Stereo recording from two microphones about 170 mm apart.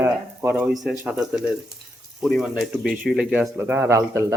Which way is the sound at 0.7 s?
Centre (ahead or behind).